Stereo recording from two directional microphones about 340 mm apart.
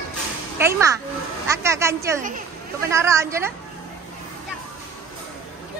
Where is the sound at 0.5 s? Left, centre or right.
Centre.